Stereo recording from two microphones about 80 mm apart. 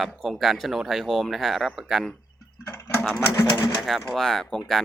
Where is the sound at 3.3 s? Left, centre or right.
Left.